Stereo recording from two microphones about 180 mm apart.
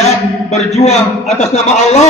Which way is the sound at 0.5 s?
40° left (ahead or behind).